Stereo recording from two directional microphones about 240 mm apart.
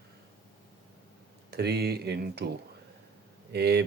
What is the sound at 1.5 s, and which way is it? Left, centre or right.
Speech, right.